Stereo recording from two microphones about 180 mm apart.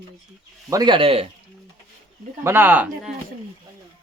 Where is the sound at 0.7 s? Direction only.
25° right (ahead or behind).